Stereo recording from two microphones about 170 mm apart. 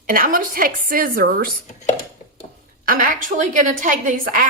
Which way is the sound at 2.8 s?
55° right (ahead or behind).